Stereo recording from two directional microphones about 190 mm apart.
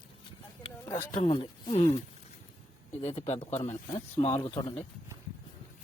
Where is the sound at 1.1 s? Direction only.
25° left (ahead or behind).